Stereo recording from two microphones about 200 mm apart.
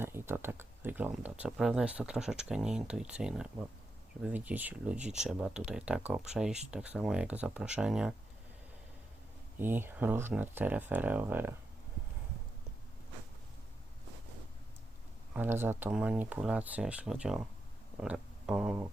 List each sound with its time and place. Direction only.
0.0 s speech: 10° right (ahead or behind)
9.6 s speech: 10° right (ahead or behind)
15.3 s speech: 10° right (ahead or behind)